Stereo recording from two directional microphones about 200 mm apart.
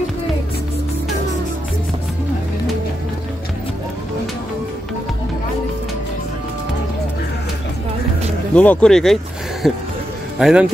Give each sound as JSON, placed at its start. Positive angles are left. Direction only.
{"t": 8.5, "sound": "a man's voice", "side_deg": 5}